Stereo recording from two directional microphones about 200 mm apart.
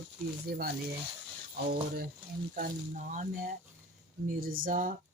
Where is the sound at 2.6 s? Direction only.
40° right (ahead or behind).